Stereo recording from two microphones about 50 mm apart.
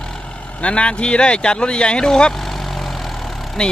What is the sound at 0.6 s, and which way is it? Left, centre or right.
Speech, left.